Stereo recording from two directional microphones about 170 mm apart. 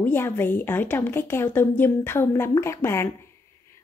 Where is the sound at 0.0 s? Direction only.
10° left (ahead or behind).